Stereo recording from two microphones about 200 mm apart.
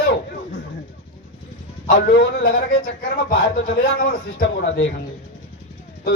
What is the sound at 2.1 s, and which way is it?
A man's voice, 55° left (ahead or behind).